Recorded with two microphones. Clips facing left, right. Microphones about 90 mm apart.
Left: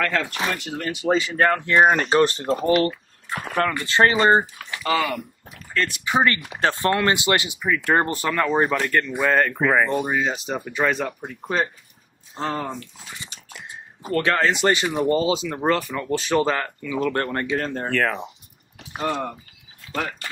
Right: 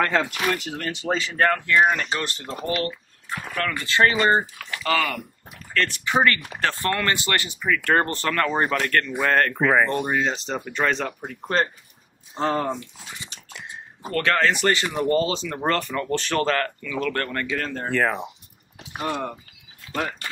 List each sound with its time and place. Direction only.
0.0 s speech: 20° right (ahead or behind)
0.5 s speech: centre (ahead or behind); by 1.6 s 20° left (ahead or behind)
1.7 s speech: 35° left (ahead or behind)
3.5 s speech: 25° left (ahead or behind); by 12.7 s centre (ahead or behind)
14.1 s speech: 20° left (ahead or behind)
17.8 s speech: 10° right (ahead or behind)
18.9 s speech: 30° left (ahead or behind)